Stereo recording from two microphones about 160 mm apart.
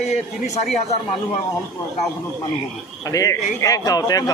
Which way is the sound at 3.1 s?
20° left (ahead or behind).